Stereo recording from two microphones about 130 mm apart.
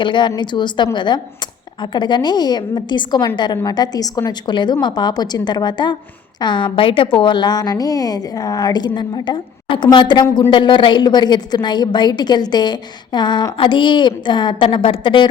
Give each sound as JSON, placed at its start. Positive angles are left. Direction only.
{"t": 0.0, "sound": "a woman's voice", "side_deg": 35}